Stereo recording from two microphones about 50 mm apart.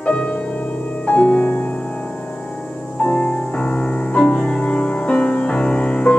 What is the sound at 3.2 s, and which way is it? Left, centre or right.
Music, left.